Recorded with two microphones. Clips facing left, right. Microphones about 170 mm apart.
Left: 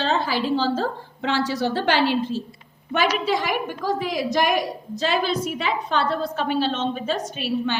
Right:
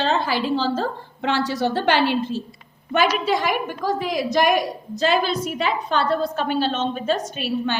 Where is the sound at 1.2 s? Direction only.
55° right (ahead or behind).